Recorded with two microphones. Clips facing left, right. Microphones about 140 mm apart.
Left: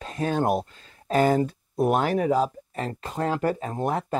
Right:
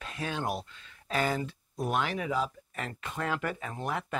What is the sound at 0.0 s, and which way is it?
Speech, 40° left (ahead or behind).